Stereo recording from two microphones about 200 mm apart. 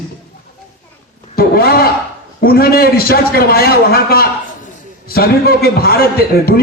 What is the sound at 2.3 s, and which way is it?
A man's voice, 50° left (ahead or behind).